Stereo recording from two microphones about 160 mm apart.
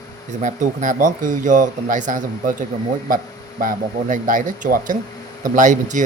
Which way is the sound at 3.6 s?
55° right (ahead or behind).